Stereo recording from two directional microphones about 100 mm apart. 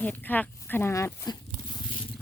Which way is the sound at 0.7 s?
25° left (ahead or behind).